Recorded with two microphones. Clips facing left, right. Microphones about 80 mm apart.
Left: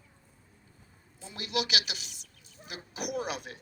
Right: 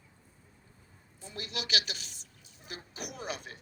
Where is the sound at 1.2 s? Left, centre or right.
Left.